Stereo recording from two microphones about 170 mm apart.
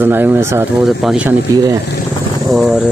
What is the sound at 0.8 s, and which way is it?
Speech, 5° right (ahead or behind).